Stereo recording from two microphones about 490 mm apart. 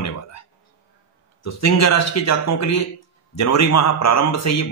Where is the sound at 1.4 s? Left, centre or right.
Left.